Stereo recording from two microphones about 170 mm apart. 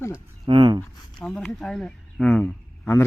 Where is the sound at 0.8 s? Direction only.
5° left (ahead or behind).